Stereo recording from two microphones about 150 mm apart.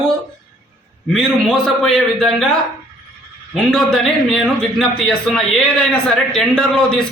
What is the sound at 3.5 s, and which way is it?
A man's voice, 5° left (ahead or behind).